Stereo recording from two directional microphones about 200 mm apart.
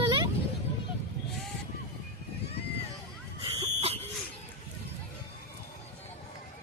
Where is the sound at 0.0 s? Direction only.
20° right (ahead or behind).